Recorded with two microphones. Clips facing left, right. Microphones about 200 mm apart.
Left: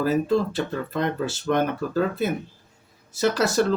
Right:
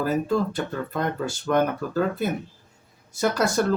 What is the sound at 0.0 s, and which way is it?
Speech, 50° right (ahead or behind).